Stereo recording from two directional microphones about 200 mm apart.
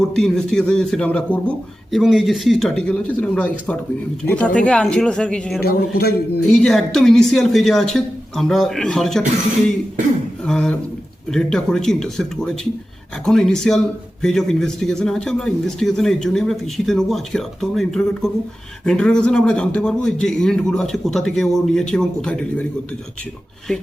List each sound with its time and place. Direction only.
0.1 s a man's voice: 5° left (ahead or behind)
6.0 s a man's voice: 50° left (ahead or behind)
6.5 s a man's voice: centre (ahead or behind)
10.4 s a man's voice: 5° left (ahead or behind)